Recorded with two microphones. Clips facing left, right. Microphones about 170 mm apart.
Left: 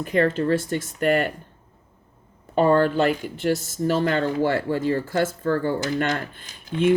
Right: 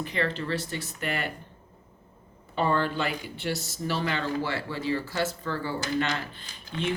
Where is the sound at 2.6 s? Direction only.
45° left (ahead or behind).